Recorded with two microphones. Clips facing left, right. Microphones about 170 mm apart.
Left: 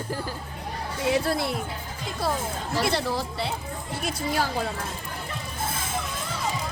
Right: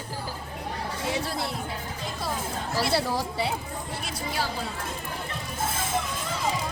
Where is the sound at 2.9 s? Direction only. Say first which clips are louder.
Right 1 dB; 10° right (ahead or behind).